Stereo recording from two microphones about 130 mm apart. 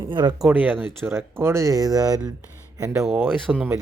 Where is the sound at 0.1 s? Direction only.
35° right (ahead or behind).